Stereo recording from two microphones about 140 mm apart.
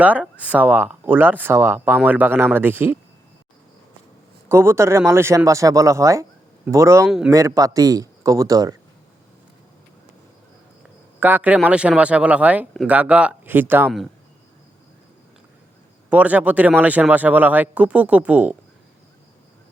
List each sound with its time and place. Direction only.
0.0 s speech: 10° right (ahead or behind)
4.4 s speech: 20° right (ahead or behind)
11.2 s speech: 10° right (ahead or behind)
16.0 s speech: 10° right (ahead or behind)